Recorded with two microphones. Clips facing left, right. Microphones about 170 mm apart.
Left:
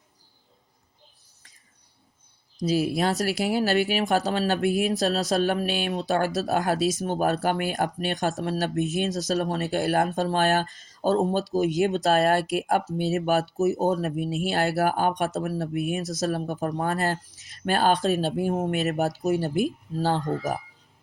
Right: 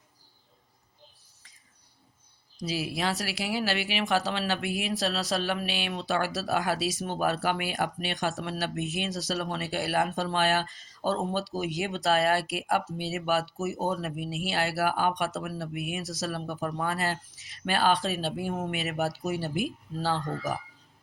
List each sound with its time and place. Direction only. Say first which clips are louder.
2.6 s speech: left 7 dB; 45° left (ahead or behind)